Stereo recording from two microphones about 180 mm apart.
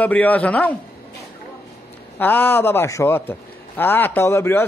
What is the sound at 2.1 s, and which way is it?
A man's voice, 10° left (ahead or behind).